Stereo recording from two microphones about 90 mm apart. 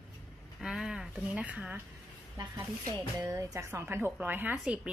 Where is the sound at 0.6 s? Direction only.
5° right (ahead or behind).